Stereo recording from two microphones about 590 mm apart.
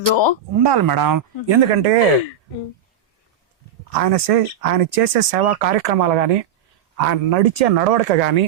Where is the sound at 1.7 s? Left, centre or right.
Right.